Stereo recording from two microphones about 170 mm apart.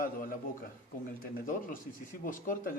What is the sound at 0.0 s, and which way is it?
A man's voice, 55° left (ahead or behind).